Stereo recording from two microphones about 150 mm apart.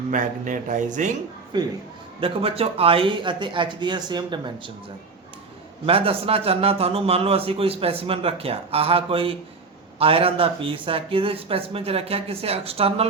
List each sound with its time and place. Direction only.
0.1 s speech: 60° right (ahead or behind)
1.5 s a man's voice: 30° right (ahead or behind)
5.8 s a man's voice: 40° right (ahead or behind)